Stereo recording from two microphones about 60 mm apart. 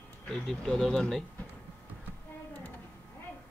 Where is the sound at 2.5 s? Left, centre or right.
Left.